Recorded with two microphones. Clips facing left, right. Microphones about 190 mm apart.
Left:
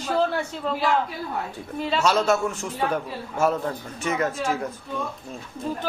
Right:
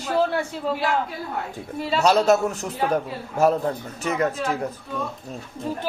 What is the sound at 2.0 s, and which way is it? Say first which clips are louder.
A man's voice: right 4 dB; 35° right (ahead or behind).